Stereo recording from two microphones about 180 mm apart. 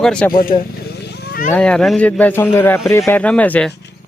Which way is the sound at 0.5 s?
30° left (ahead or behind).